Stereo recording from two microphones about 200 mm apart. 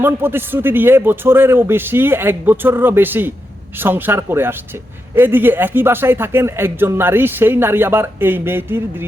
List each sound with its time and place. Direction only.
0.0 s speech: 10° right (ahead or behind)